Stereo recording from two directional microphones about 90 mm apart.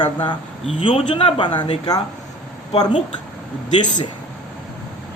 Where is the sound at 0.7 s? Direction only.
85° left; by 1.6 s 60° left (ahead or behind).